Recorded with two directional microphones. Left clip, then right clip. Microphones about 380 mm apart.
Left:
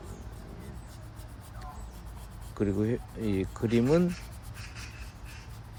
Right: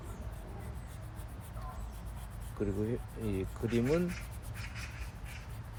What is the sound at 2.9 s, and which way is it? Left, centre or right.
Speech, left.